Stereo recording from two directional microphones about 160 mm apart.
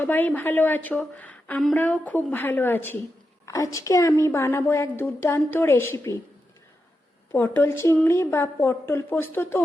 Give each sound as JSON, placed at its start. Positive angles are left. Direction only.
{"t": 0.0, "sound": "a woman's voice", "side_deg": 10}
{"t": 7.3, "sound": "a woman's voice", "side_deg": 10}